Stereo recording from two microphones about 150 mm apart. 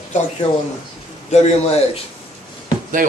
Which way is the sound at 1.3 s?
50° left (ahead or behind).